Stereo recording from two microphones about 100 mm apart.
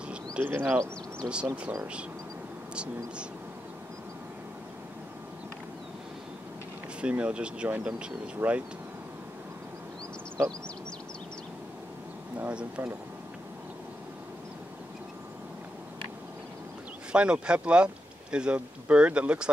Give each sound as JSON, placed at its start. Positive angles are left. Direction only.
{"t": 0.1, "sound": "bird", "side_deg": -20}
{"t": 1.2, "sound": "speech", "side_deg": -10}
{"t": 2.7, "sound": "speech", "side_deg": -10}
{"t": 7.0, "sound": "speech", "side_deg": -10}
{"t": 12.4, "sound": "speech", "side_deg": -10}
{"t": 17.1, "sound": "speech", "side_deg": -10}